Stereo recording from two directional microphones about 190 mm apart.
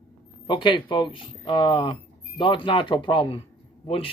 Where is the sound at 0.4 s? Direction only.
25° left (ahead or behind).